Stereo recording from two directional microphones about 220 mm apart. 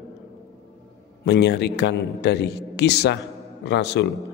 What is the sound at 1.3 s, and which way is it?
Speech, 50° left (ahead or behind).